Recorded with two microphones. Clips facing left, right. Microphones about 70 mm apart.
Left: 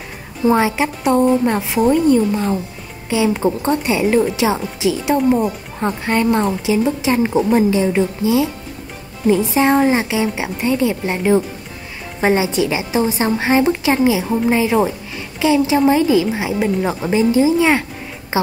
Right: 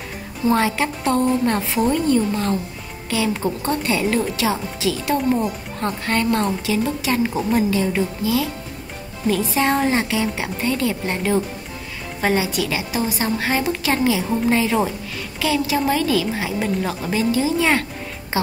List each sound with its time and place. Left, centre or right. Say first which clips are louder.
0.5 s a woman's voice: left 4 dB; centre
18.3 s music: left 4 dB; left